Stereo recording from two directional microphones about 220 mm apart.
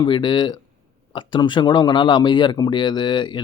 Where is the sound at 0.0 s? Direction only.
20° left (ahead or behind).